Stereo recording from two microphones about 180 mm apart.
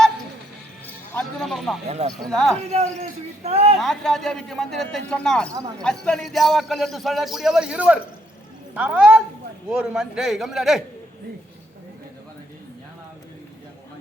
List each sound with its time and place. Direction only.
1.1 s music: centre (ahead or behind)
1.9 s a man's voice: 35° right (ahead or behind)
2.1 s a man's voice: centre (ahead or behind)
2.7 s a man's voice: 35° right (ahead or behind)
3.8 s a man's voice: centre (ahead or behind)